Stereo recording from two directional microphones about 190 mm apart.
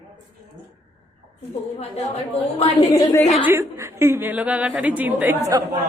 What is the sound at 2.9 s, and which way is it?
Speech, 15° left (ahead or behind).